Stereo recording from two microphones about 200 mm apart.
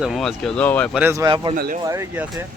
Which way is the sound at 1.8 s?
15° right (ahead or behind).